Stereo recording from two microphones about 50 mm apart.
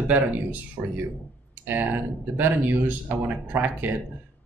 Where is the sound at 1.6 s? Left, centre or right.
Right.